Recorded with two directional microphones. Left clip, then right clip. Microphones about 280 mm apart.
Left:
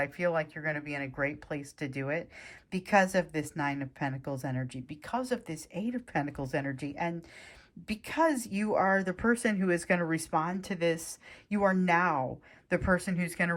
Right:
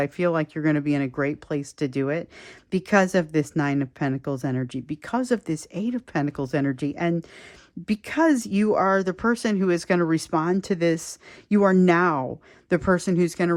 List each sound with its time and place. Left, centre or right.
0.0 s speech: centre